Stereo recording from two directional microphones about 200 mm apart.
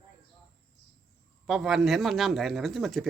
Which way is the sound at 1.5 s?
Centre (ahead or behind).